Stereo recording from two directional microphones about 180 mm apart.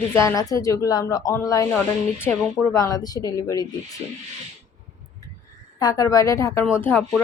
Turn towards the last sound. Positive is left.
turn(degrees=10)  # may be behind; listen again after turning